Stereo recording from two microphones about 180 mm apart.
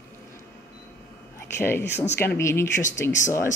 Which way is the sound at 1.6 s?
10° left (ahead or behind).